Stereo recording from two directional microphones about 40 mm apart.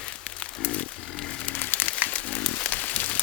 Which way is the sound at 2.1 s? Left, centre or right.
Left.